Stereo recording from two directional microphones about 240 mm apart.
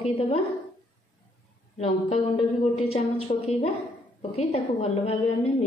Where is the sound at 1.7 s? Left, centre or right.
Left.